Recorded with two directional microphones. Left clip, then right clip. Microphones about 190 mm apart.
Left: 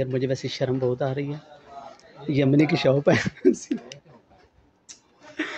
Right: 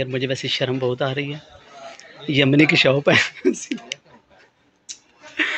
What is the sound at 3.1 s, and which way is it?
Speech, 15° left (ahead or behind).